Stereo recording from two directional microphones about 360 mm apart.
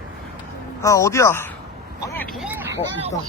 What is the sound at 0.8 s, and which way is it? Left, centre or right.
Speech, centre.